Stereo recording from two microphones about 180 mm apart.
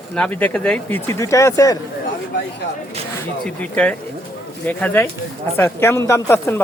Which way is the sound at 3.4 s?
5° left (ahead or behind).